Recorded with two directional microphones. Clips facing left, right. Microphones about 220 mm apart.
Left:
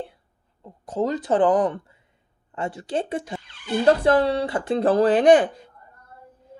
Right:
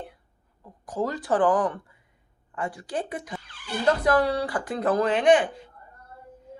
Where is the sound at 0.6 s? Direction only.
25° left (ahead or behind).